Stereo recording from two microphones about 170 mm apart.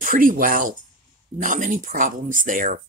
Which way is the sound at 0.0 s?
55° right (ahead or behind).